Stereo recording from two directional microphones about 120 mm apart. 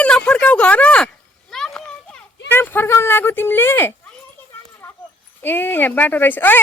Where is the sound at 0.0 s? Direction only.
10° left (ahead or behind).